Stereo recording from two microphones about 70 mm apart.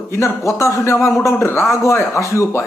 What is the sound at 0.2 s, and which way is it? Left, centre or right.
A man's voice, left.